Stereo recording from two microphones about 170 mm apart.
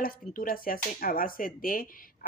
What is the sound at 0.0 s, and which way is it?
Speech, 55° left (ahead or behind).